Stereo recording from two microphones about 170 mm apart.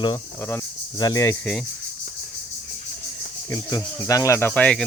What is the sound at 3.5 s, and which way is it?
Speech, 20° left (ahead or behind).